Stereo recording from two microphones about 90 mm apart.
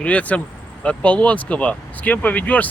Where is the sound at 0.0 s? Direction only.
15° left (ahead or behind).